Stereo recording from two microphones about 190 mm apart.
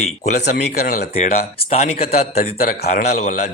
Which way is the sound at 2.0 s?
55° left (ahead or behind).